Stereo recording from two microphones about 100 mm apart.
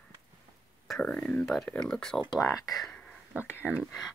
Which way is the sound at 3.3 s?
15° right (ahead or behind).